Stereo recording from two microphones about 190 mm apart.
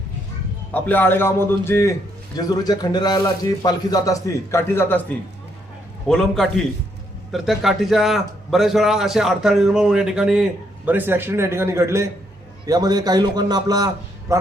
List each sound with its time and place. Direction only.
0.7 s a man's voice: 10° left (ahead or behind); by 14.3 s 20° right (ahead or behind)